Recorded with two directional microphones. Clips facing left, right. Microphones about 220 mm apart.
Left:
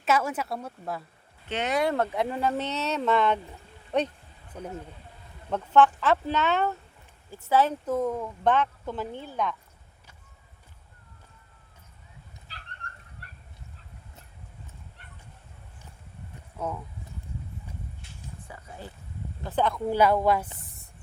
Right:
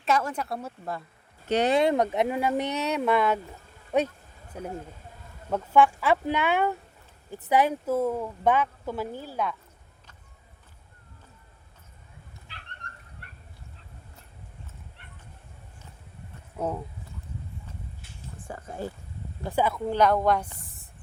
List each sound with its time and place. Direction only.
0.0 s a woman's voice: 5° left (ahead or behind)
1.5 s speech: 40° right (ahead or behind)
1.7 s speech: 20° right (ahead or behind)
12.5 s cat: 40° left (ahead or behind)
16.6 s speech: 30° right (ahead or behind)
18.3 s a sound: 50° right (ahead or behind)
19.5 s speech: 10° right (ahead or behind)
19.9 s a woman's voice: 5° left (ahead or behind)